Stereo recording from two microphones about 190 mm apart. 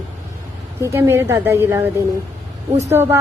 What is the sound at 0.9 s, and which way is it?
Speech, 15° right (ahead or behind).